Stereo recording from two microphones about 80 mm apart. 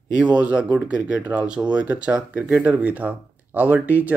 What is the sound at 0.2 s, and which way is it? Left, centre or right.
Speech, centre.